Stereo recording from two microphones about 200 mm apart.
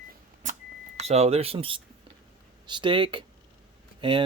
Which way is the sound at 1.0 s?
30° right (ahead or behind).